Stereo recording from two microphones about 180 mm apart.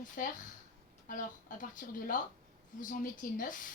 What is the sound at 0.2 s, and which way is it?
A woman's voice, 50° left (ahead or behind).